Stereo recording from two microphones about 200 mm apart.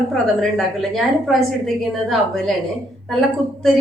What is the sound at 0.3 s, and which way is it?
A woman's voice, centre (ahead or behind).